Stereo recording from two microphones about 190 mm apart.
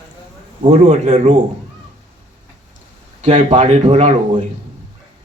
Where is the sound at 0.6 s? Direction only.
35° right (ahead or behind).